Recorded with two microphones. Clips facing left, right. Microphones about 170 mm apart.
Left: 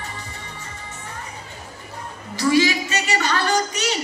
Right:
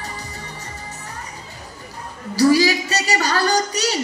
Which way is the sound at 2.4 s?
35° right (ahead or behind).